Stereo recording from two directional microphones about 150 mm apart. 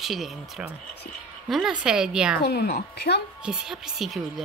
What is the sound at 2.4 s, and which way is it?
Speech, 90° left.